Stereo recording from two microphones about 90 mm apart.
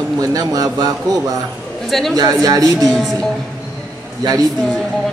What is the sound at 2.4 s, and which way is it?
Music, 45° right (ahead or behind).